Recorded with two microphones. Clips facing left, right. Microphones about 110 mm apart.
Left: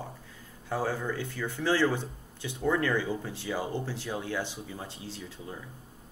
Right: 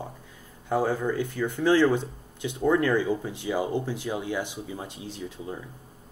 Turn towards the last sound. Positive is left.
turn(degrees=-15)  # may be behind; listen again after turning